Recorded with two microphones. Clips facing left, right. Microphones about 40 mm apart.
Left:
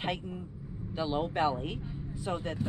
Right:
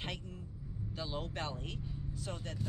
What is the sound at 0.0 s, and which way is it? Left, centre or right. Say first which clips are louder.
Speech: left 9 dB; left.